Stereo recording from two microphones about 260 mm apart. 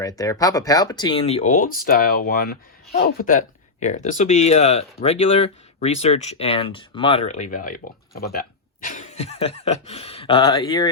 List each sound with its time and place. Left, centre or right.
0.0 s speech: centre